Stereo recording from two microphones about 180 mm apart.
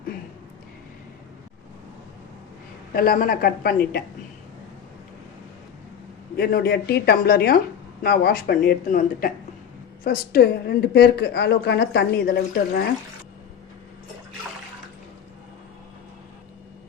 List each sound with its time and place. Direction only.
2.9 s speech: 55° left (ahead or behind)
6.3 s a woman's voice: 60° left (ahead or behind)